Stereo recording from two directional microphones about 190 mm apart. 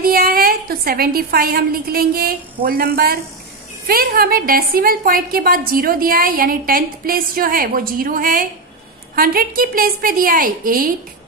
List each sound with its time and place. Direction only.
0.0 s a woman's voice: 50° right (ahead or behind)